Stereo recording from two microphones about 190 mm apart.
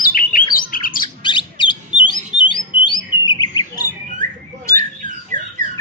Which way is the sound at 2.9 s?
20° left (ahead or behind).